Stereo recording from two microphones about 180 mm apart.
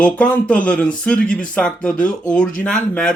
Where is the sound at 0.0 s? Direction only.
10° left (ahead or behind).